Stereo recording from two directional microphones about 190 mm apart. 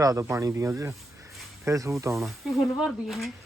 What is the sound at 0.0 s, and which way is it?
A man's voice, 15° right (ahead or behind).